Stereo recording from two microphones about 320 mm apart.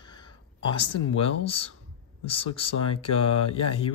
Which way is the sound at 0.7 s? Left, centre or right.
Left.